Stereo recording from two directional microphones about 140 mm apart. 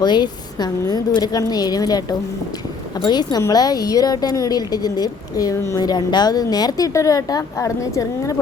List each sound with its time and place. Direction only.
0.0 s a woman's voice: 30° left (ahead or behind)
3.0 s a woman's voice: 30° left (ahead or behind)